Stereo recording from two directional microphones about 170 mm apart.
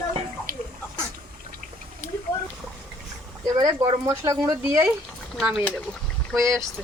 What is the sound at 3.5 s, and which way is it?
Speech, 25° right (ahead or behind).